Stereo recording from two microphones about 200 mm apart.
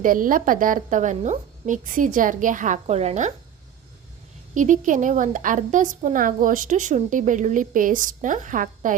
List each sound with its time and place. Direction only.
0.0 s a woman's voice: 45° right (ahead or behind)
4.5 s a woman's voice: 40° right (ahead or behind)